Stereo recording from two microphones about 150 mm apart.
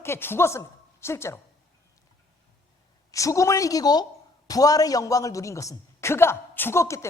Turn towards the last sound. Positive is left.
turn(degrees=15)  # may be behind; listen again after turning